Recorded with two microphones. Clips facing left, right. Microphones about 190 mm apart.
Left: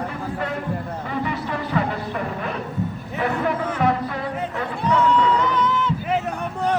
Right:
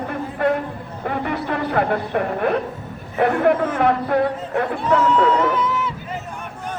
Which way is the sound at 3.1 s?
60° right (ahead or behind).